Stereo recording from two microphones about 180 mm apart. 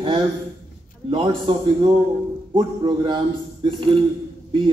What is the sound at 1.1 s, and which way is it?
A man's voice, 25° right (ahead or behind).